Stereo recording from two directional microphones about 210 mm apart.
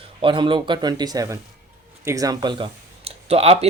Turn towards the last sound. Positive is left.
turn(degrees=-30)  # may be behind; listen again after turning